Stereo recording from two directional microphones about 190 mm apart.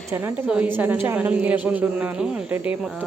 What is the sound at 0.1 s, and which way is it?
A woman's voice, 10° right (ahead or behind).